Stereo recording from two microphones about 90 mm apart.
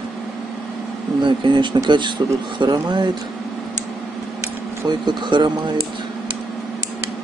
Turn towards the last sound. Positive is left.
turn(degrees=-60)  # may be behind; listen again after turning